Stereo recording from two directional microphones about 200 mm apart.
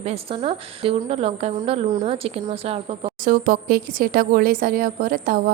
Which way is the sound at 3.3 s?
45° right (ahead or behind).